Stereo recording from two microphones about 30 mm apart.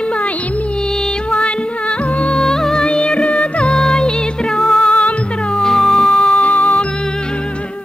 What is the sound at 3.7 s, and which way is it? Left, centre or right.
Music, left.